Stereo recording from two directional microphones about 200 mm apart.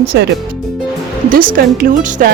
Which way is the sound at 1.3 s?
45° right (ahead or behind).